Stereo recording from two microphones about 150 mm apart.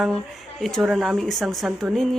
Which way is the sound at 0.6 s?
Centre (ahead or behind).